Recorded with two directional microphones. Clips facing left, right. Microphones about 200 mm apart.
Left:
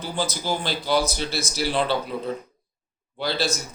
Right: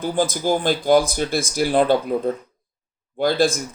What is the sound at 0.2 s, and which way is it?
Speech, 50° right (ahead or behind).